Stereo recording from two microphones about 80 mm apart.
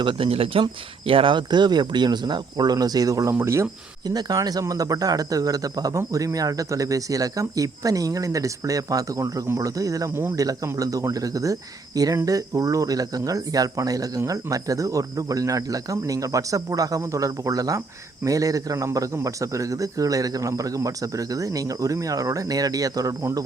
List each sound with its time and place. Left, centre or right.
0.2 s speech: right
4.0 s a man's voice: right